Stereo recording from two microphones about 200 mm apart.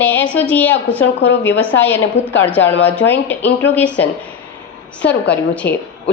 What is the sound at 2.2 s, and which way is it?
A woman's voice, 60° left (ahead or behind).